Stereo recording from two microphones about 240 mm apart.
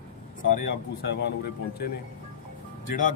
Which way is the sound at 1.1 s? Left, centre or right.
Left.